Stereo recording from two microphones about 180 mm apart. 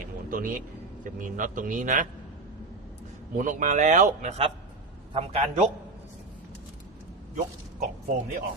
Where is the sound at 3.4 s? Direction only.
45° right (ahead or behind).